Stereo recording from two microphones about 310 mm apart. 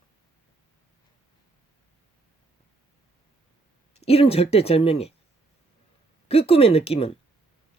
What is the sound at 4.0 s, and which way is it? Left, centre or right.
Speech, centre.